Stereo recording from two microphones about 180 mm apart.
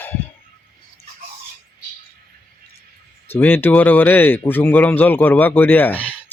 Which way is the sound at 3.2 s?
10° left (ahead or behind).